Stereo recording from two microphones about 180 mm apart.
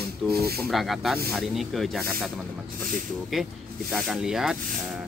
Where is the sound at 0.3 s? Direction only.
60° right (ahead or behind).